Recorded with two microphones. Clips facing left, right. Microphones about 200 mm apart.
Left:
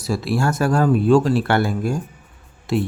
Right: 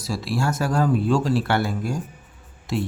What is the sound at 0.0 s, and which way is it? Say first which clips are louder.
Speech: left 4 dB; 55° left (ahead or behind).